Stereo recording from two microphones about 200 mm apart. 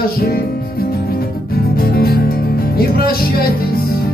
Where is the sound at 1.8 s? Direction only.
50° left (ahead or behind).